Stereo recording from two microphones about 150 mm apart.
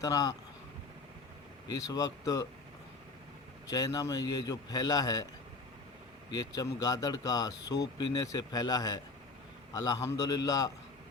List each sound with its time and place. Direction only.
0.0 s speech: 25° left (ahead or behind)
1.6 s speech: 25° left (ahead or behind)
3.7 s speech: 25° left (ahead or behind)
6.3 s speech: 25° left (ahead or behind)